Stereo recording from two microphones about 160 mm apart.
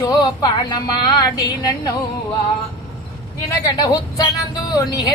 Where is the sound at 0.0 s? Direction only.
25° left (ahead or behind).